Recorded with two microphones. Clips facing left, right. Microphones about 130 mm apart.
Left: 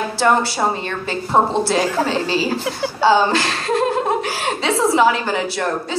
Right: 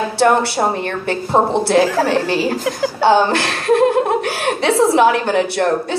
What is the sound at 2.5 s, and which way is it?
Speech, 40° right (ahead or behind).